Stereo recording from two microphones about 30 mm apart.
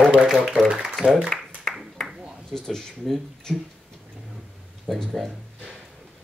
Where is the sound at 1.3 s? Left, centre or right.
Centre.